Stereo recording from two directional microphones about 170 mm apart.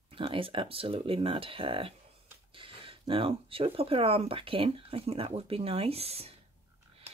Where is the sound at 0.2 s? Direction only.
30° right (ahead or behind).